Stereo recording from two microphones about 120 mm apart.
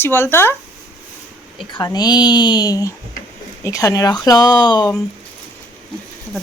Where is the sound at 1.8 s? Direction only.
35° left (ahead or behind).